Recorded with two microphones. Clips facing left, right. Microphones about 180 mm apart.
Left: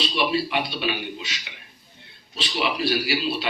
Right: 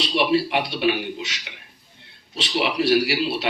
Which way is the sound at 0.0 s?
70° right (ahead or behind).